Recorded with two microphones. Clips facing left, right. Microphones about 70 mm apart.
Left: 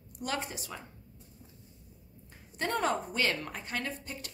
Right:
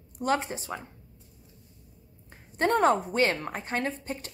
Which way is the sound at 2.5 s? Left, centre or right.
Right.